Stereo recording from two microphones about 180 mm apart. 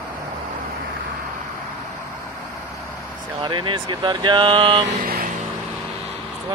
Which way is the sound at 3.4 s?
25° right (ahead or behind).